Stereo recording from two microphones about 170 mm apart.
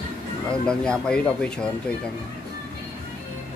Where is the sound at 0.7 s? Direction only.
5° left (ahead or behind).